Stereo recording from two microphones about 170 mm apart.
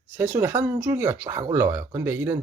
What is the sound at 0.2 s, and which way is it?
Speech, 15° right (ahead or behind).